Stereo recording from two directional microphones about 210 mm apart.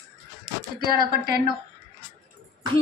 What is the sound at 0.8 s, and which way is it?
Speech, 45° right (ahead or behind).